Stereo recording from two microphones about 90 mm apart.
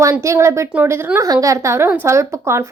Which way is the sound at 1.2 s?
40° right (ahead or behind).